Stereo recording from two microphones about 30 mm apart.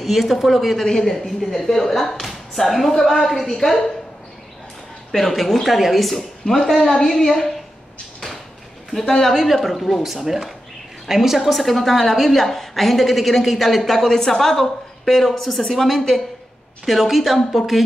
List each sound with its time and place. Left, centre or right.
0.0 s a woman's voice: centre
0.8 s speech: centre
5.1 s a woman's voice: centre
9.2 s a woman's voice: centre
10.0 s a woman's voice: centre
11.4 s a woman's voice: centre
14.0 s a woman's voice: centre
16.8 s a woman's voice: centre